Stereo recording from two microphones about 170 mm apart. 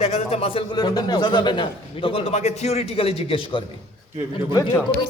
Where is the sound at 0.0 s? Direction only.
35° left (ahead or behind).